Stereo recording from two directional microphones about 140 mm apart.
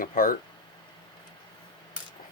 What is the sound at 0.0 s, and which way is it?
Speech, 85° left.